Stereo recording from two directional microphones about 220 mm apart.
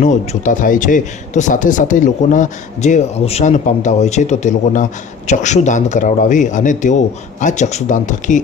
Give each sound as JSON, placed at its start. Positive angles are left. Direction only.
{"t": 0.0, "sound": "speech", "side_deg": 35}